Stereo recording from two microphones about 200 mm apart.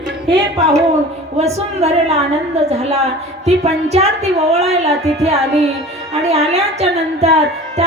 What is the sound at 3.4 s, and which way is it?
A woman's voice, 30° right (ahead or behind).